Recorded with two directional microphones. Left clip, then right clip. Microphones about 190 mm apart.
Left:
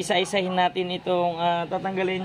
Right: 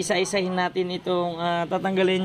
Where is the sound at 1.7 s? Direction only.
25° right (ahead or behind).